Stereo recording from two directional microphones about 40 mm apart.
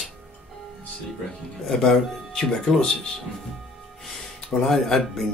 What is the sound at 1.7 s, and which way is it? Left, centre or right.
Speech, centre.